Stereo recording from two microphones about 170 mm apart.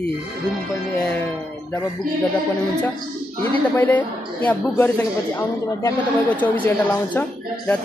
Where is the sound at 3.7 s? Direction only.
10° left (ahead or behind).